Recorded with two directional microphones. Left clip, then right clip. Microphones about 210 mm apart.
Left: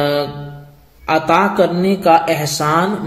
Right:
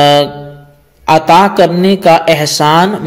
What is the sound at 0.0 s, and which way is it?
A man's voice, 40° right (ahead or behind).